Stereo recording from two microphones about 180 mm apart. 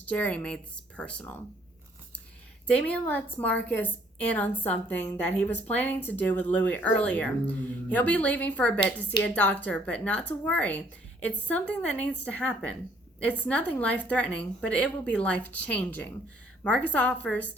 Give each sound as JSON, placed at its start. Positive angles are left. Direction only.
{"t": 0.1, "sound": "a woman's voice", "side_deg": 10}
{"t": 2.6, "sound": "a woman's voice", "side_deg": 5}